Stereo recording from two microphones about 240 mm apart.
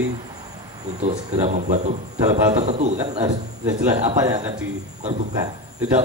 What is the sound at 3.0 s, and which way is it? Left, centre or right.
Speech, centre.